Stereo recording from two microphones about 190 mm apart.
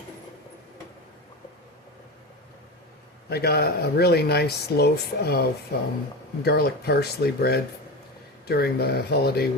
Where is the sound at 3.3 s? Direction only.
55° left (ahead or behind).